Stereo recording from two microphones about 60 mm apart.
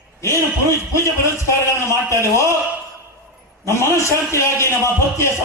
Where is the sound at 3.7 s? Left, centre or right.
Left.